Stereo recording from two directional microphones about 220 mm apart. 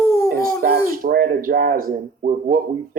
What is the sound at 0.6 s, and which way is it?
A woman's voice, 40° right (ahead or behind).